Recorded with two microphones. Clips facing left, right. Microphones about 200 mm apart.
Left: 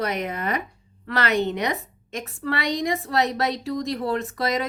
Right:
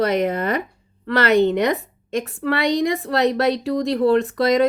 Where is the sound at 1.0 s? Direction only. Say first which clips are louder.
Right 7 dB; 60° right (ahead or behind).